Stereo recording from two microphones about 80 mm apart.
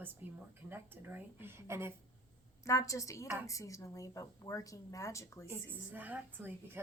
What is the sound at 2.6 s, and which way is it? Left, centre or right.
A woman's voice, left.